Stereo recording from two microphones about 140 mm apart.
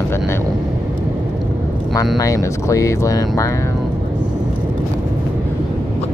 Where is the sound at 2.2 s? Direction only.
25° left (ahead or behind).